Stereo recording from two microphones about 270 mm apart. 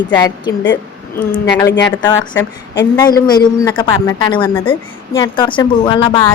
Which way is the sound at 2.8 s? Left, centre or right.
Centre.